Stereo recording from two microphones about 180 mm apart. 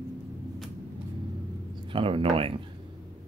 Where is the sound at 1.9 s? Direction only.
30° right (ahead or behind).